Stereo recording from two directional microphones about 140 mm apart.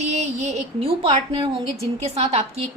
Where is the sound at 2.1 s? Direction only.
45° right (ahead or behind).